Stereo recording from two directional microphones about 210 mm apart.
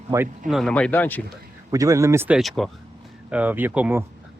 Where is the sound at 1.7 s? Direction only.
15° right (ahead or behind).